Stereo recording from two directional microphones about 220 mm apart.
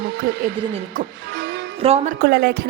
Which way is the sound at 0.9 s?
50° right (ahead or behind).